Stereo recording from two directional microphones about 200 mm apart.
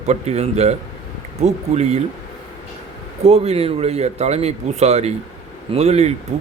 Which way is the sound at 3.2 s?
30° right (ahead or behind).